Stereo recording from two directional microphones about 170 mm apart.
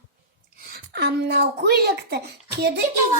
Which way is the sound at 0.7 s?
75° right (ahead or behind).